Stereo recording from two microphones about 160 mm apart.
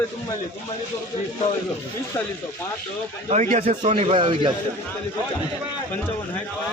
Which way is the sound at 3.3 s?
55° right (ahead or behind).